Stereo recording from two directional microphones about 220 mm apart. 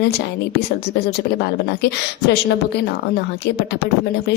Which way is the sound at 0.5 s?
50° left (ahead or behind).